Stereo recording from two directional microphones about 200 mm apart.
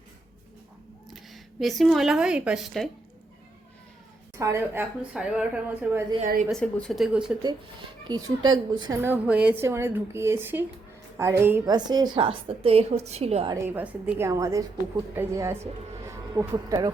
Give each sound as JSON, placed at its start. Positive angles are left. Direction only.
{"t": 1.1, "sound": "speech", "side_deg": 0}
{"t": 4.4, "sound": "speech", "side_deg": -15}
{"t": 6.2, "sound": "a woman's voice", "side_deg": -45}
{"t": 6.5, "sound": "speech", "side_deg": 5}
{"t": 7.4, "sound": "speech", "side_deg": -20}
{"t": 9.0, "sound": "speech", "side_deg": -10}
{"t": 13.5, "sound": "speech", "side_deg": -10}